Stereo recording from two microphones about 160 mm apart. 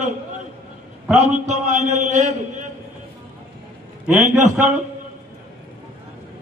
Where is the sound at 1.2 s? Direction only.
50° right (ahead or behind).